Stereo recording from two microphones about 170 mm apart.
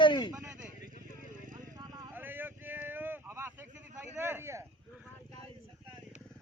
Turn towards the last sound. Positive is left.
turn(degrees=-10)  # may be behind; listen again after turning